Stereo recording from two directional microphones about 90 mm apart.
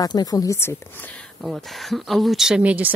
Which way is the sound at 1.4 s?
Centre (ahead or behind).